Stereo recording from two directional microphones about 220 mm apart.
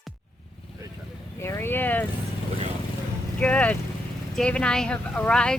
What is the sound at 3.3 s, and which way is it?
Vehicle, 5° left (ahead or behind).